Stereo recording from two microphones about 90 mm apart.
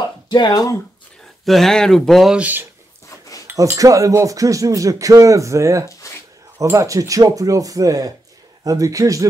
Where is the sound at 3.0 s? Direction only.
40° left (ahead or behind).